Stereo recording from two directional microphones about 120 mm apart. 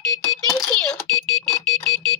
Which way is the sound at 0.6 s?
5° left (ahead or behind).